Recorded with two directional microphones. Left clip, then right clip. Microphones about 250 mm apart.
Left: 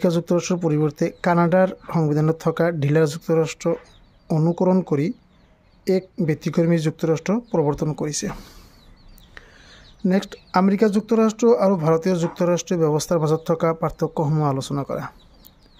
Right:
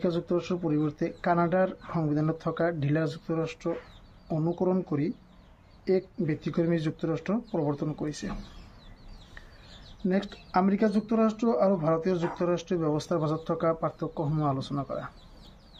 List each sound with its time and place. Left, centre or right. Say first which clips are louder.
0.0 s speech: left 8 dB; left
10.0 s speech: left 7 dB; left